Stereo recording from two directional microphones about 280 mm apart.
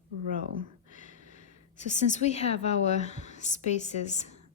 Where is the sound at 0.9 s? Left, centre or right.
Left.